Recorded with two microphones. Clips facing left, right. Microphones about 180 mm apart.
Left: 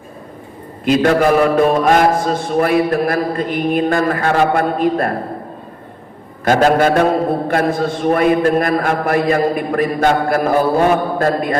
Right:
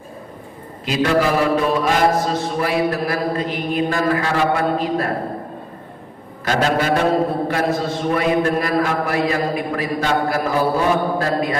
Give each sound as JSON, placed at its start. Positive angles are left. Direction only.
{"t": 0.9, "sound": "mantra", "side_deg": 50}
{"t": 6.4, "sound": "mantra", "side_deg": 50}